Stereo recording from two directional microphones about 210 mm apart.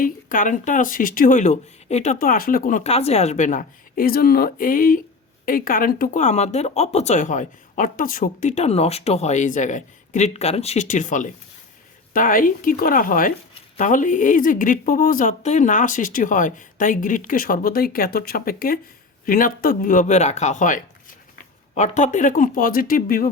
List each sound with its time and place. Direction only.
0.0 s speech: 40° left (ahead or behind)